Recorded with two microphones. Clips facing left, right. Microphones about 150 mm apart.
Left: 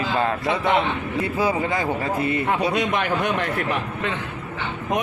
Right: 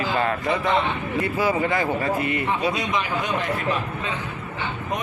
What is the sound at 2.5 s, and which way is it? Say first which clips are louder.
A man's voice: left 2 dB; 60° left (ahead or behind).